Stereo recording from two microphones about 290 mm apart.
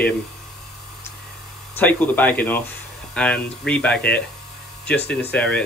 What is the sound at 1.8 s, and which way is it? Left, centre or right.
Speech, centre.